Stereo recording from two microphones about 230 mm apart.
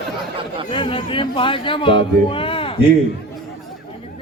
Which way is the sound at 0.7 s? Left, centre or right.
Left.